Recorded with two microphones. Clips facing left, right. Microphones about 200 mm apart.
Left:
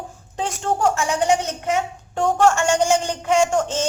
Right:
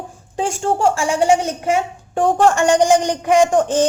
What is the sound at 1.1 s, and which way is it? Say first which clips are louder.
Child singing: right 4 dB; 10° right (ahead or behind).